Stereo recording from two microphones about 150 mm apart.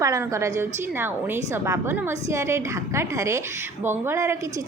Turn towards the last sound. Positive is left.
turn(degrees=-20)  # may be behind; listen again after turning